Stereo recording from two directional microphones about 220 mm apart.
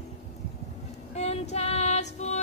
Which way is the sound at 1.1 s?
30° left (ahead or behind).